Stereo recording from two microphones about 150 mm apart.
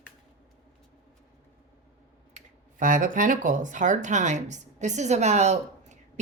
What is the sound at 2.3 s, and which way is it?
A woman's voice, 60° right (ahead or behind).